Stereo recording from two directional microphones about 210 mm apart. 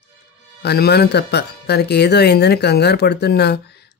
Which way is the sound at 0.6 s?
50° left (ahead or behind).